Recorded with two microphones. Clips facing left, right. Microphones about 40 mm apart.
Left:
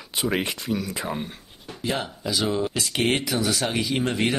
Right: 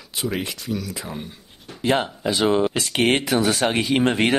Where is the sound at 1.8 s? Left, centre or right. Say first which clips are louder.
Right 7 dB; right.